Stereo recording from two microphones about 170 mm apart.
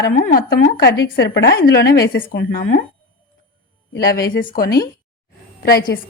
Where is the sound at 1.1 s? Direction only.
85° left.